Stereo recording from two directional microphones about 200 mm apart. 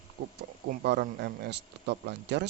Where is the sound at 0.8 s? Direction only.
55° right (ahead or behind).